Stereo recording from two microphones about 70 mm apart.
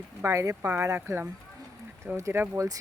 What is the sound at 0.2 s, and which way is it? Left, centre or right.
Speech, right.